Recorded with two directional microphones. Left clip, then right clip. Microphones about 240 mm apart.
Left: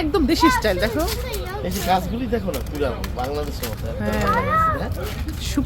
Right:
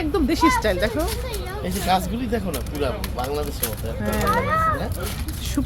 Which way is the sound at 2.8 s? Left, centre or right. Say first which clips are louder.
Even; right.